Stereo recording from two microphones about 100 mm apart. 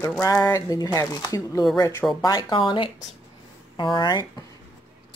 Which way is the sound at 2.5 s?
60° left (ahead or behind).